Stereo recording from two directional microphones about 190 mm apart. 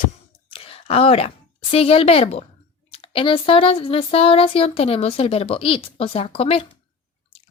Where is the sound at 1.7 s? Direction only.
30° left (ahead or behind).